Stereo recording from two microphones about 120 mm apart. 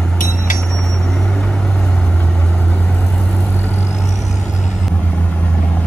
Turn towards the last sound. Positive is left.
turn(degrees=10)  # may be behind; listen again after turning